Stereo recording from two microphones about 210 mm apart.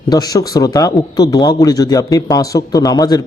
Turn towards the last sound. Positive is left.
turn(degrees=20)  # may be behind; listen again after turning